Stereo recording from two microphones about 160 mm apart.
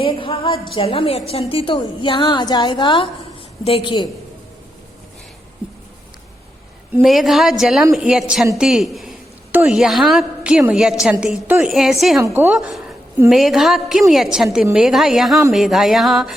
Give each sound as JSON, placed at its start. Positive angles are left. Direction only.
{"t": 0.0, "sound": "a woman's voice", "side_deg": 35}
{"t": 7.0, "sound": "a woman's voice", "side_deg": 0}
{"t": 12.2, "sound": "a woman's voice", "side_deg": -15}
{"t": 12.5, "sound": "a woman's voice", "side_deg": 0}